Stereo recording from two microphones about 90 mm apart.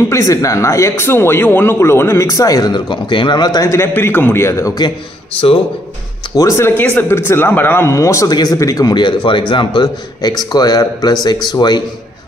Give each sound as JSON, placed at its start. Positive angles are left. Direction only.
{"t": 0.1, "sound": "speech", "side_deg": 40}
{"t": 3.7, "sound": "speech", "side_deg": 25}
{"t": 6.3, "sound": "speech", "side_deg": 35}
{"t": 6.8, "sound": "speech", "side_deg": 25}
{"t": 7.9, "sound": "speech", "side_deg": 35}
{"t": 8.3, "sound": "speech", "side_deg": 45}
{"t": 8.9, "sound": "speech", "side_deg": 60}
{"t": 9.8, "sound": "speech", "side_deg": 50}